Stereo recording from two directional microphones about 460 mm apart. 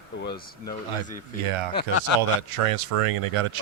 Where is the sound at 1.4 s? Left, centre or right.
Right.